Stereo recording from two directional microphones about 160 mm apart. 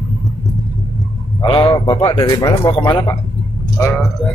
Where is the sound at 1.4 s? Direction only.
30° left (ahead or behind).